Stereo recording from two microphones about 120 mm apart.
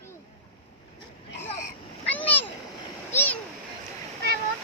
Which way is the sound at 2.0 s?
10° left (ahead or behind).